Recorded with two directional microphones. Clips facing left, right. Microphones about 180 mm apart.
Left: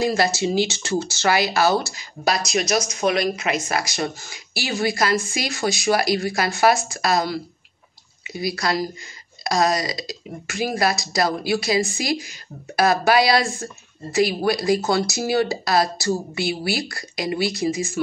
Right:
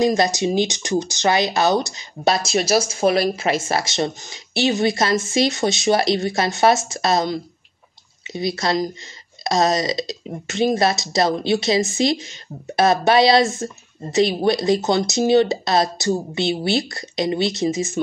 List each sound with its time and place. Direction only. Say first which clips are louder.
0.0 s speech: right 3 dB; 20° right (ahead or behind)